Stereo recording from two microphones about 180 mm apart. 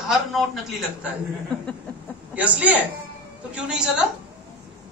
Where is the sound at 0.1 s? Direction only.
Centre (ahead or behind).